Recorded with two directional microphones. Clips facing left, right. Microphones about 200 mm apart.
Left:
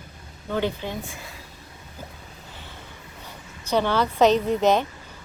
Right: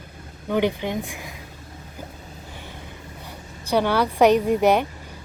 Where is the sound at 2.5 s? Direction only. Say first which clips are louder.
Right 4 dB; 15° right (ahead or behind).